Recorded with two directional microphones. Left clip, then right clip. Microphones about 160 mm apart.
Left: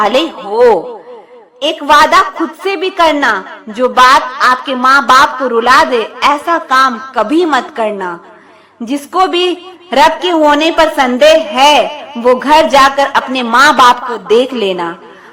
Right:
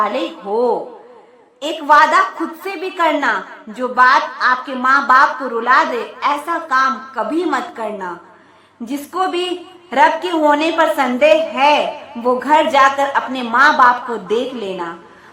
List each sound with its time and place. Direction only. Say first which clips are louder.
0.5 s a woman's voice: left 9 dB; 40° left (ahead or behind)